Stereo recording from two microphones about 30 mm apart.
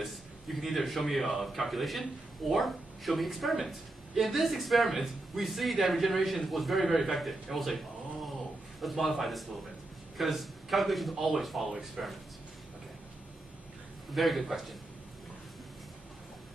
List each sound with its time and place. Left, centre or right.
0.0 s a man's voice: centre
7.4 s a sound: centre
8.8 s a man's voice: centre
14.1 s a man's voice: centre